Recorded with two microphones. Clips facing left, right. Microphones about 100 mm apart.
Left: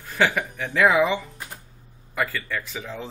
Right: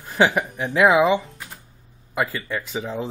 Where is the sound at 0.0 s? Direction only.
20° right (ahead or behind).